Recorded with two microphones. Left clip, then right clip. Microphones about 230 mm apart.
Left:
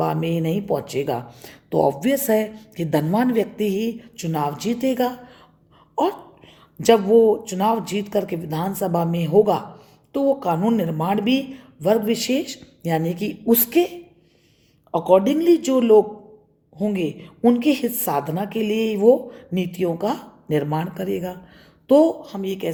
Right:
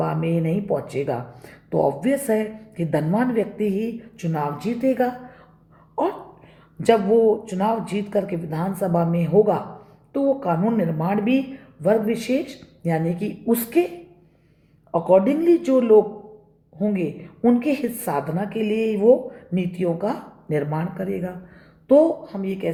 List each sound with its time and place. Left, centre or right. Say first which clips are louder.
0.0 s speech: left 1 dB; left
6.7 s speech: left 2 dB; left
9.3 s a man's voice: left 1 dB; left
10.1 s speech: left 1 dB; left
14.9 s a woman's voice: left 1 dB; left